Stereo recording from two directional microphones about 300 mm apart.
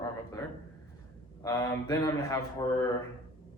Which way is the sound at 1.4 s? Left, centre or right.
Centre.